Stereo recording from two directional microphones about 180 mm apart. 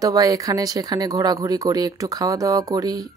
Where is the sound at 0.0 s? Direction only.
20° right (ahead or behind).